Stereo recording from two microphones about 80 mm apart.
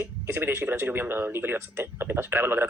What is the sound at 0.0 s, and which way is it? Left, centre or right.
Speech, right.